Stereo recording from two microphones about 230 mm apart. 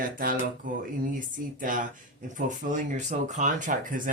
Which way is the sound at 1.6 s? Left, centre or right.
Right.